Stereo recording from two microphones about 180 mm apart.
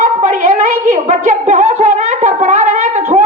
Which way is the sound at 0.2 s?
45° right (ahead or behind).